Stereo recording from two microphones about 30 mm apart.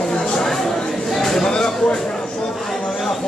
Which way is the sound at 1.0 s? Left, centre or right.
Centre.